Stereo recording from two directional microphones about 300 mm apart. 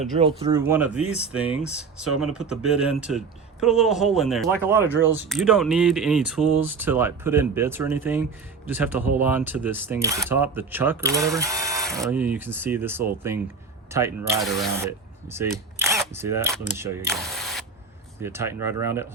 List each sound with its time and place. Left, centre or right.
0.0 s speech: centre
0.6 s speech: centre